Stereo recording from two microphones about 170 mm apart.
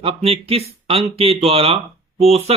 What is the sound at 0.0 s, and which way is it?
Speech, 35° right (ahead or behind).